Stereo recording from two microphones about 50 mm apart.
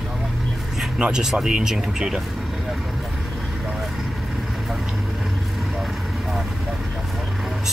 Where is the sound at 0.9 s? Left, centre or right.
Right.